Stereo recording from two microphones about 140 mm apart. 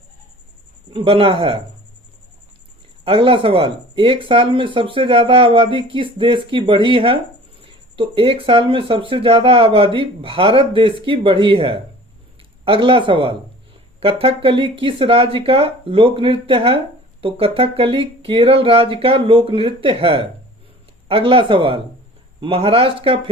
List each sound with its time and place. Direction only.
0.9 s speech: 40° right (ahead or behind)
3.0 s speech: 40° right (ahead or behind)